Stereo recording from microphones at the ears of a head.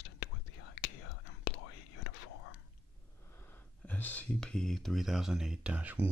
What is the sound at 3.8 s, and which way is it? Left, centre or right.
Speech, centre.